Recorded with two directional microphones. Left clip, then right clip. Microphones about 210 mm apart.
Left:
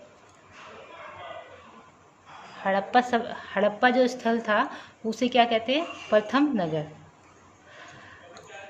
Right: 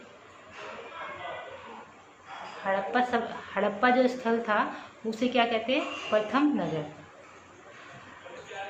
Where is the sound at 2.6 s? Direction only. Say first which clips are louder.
Left 4 dB; 50° left (ahead or behind).